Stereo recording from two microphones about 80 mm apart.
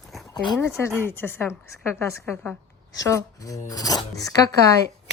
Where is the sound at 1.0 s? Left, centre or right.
Left.